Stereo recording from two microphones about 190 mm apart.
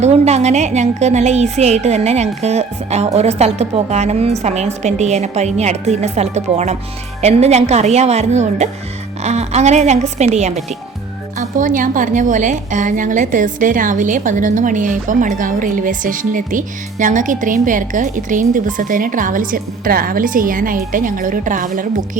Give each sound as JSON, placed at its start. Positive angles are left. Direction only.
{"t": 0.0, "sound": "a woman's voice", "side_deg": -35}